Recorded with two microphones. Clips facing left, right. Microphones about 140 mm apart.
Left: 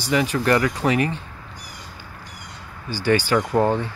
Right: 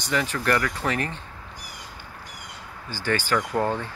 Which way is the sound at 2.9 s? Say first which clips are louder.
Left 6 dB; 15° left (ahead or behind).